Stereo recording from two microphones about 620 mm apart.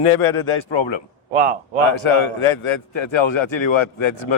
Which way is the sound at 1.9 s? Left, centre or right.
Left.